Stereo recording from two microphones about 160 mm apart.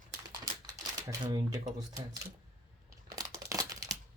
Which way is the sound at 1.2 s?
25° right (ahead or behind).